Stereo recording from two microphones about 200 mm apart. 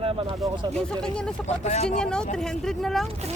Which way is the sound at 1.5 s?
35° left (ahead or behind).